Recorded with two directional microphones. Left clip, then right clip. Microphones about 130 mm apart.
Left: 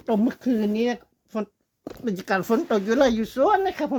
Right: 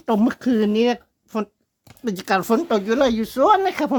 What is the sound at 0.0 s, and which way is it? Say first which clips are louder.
Speech: right 4 dB; 35° right (ahead or behind).